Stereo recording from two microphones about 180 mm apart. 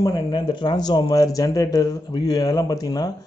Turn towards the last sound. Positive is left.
turn(degrees=20)  # may be behind; listen again after turning